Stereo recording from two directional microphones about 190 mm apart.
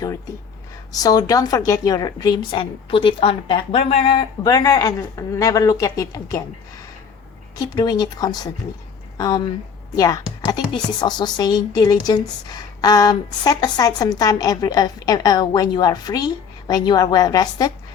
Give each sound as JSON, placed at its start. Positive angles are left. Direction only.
{"t": 0.9, "sound": "a woman's voice", "side_deg": 20}
{"t": 7.6, "sound": "a woman's voice", "side_deg": 20}